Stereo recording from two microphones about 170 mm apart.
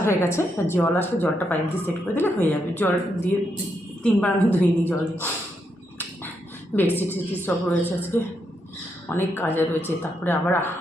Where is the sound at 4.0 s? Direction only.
5° left (ahead or behind).